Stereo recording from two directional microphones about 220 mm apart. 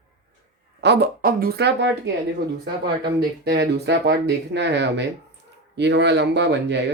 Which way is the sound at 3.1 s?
50° right (ahead or behind).